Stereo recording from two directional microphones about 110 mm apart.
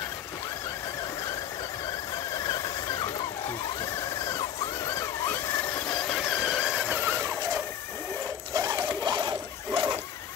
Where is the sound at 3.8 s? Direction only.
30° left (ahead or behind); by 6.9 s 5° right (ahead or behind).